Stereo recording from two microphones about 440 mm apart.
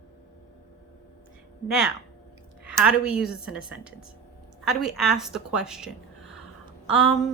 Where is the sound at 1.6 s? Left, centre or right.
Centre.